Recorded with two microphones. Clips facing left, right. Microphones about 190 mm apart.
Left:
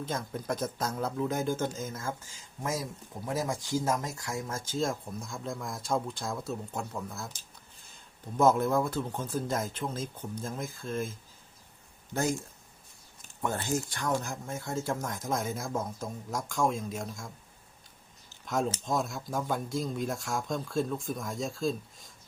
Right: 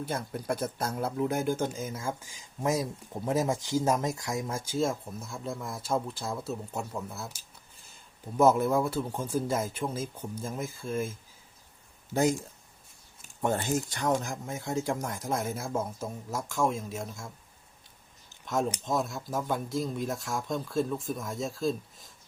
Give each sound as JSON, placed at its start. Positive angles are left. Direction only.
{"t": 0.0, "sound": "speech", "side_deg": -10}
{"t": 13.4, "sound": "speech", "side_deg": -20}
{"t": 18.4, "sound": "speech", "side_deg": 0}